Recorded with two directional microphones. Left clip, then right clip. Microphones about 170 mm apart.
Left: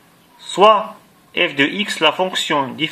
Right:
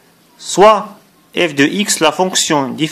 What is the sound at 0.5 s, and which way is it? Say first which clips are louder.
A man's voice: right 3 dB; 45° right (ahead or behind).